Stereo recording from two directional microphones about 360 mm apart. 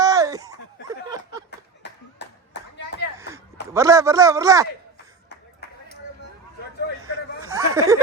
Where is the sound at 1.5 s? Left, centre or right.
Left.